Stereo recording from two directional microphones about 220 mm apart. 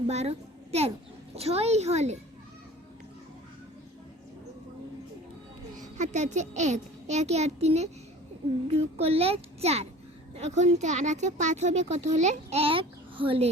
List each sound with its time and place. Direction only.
0.1 s a child's voice: 30° right (ahead or behind)
5.7 s a child's voice: 35° right (ahead or behind)